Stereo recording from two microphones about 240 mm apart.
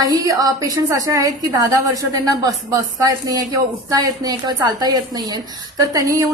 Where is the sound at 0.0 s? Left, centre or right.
Centre.